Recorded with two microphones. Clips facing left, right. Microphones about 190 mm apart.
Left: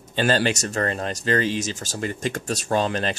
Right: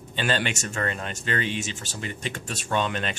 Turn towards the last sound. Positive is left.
turn(degrees=35)  # may be behind; listen again after turning